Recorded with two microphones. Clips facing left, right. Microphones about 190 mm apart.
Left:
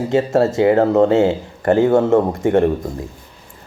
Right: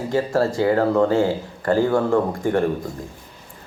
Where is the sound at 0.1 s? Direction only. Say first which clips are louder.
Left 4 dB; 25° left (ahead or behind).